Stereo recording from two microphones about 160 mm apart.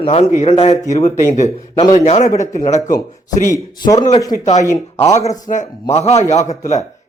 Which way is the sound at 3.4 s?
20° left (ahead or behind).